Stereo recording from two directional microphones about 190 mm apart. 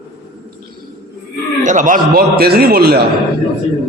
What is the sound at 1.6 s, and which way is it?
A man's voice, 40° right (ahead or behind).